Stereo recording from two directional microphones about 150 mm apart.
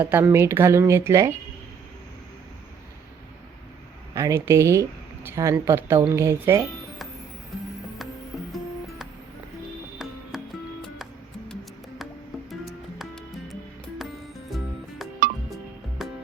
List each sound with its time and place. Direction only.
0.0 s speech: 15° right (ahead or behind)
4.1 s speech: 20° right (ahead or behind)
10.0 s music: centre (ahead or behind)
16.0 s music: centre (ahead or behind)